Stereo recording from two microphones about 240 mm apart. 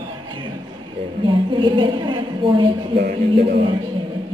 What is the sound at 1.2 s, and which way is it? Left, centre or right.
A woman's voice, centre.